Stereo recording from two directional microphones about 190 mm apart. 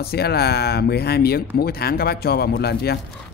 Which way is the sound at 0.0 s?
55° left (ahead or behind).